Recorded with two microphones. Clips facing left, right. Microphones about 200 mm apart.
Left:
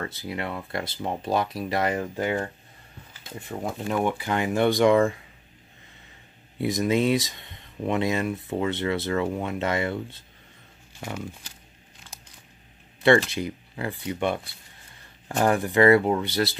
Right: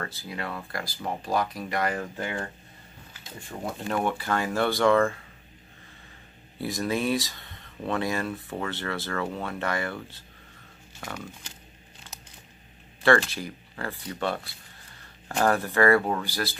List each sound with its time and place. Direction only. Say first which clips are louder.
0.0 s speech: left 3 dB; 25° left (ahead or behind)
3.9 s speech: left 2 dB; 15° left (ahead or behind)
6.6 s speech: left 5 dB; 20° left (ahead or behind)
13.0 s speech: left 3 dB; 20° left (ahead or behind)